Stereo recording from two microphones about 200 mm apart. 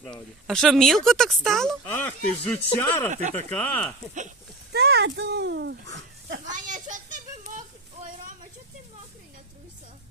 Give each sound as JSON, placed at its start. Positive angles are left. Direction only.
{"t": 0.0, "sound": "speech", "side_deg": 5}
{"t": 4.7, "sound": "speech", "side_deg": -55}
{"t": 6.5, "sound": "a sound", "side_deg": -40}